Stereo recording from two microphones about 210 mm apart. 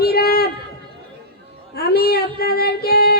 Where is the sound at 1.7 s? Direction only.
45° left (ahead or behind).